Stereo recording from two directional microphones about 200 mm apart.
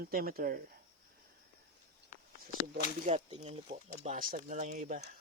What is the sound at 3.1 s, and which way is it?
Speech, 30° right (ahead or behind).